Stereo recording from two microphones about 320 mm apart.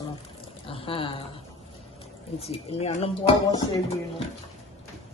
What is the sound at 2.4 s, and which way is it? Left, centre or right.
A man's voice, centre.